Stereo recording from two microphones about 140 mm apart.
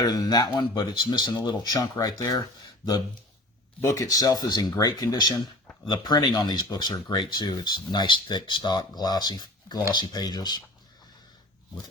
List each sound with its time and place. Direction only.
0.0 s speech: 30° left (ahead or behind)